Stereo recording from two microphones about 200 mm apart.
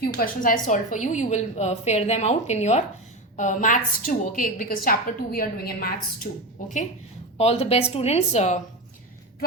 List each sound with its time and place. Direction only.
0.0 s a woman's voice: 45° left (ahead or behind)
7.3 s a woman's voice: 30° left (ahead or behind)